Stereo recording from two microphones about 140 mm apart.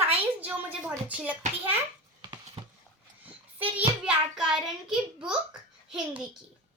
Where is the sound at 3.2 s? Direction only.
10° right (ahead or behind).